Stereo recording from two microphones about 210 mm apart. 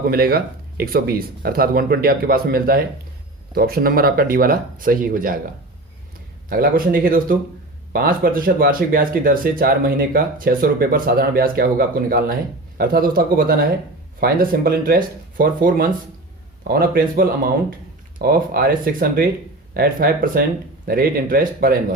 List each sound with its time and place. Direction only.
0.1 s speech: 45° right (ahead or behind)
6.5 s speech: 45° right (ahead or behind)